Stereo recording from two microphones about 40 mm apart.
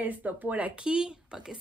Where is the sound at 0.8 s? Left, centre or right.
Right.